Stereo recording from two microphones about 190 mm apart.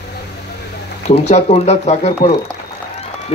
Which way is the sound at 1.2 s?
35° left (ahead or behind).